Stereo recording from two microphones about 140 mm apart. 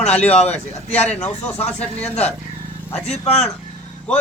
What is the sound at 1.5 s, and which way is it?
Speech, 50° left (ahead or behind).